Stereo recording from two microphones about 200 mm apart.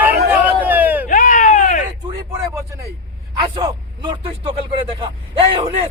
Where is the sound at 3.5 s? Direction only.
25° right (ahead or behind).